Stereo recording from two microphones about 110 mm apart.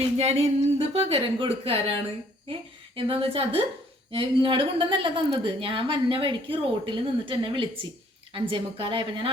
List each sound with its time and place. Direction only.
0.2 s a woman's voice: 70° right (ahead or behind); by 9.3 s 50° right (ahead or behind)